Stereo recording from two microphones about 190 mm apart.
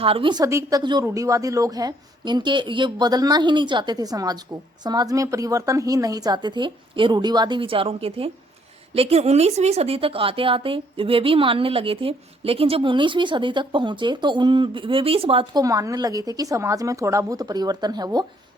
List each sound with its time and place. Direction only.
0.0 s a woman's voice: 30° right (ahead or behind)
15.6 s a woman's voice: 15° right (ahead or behind)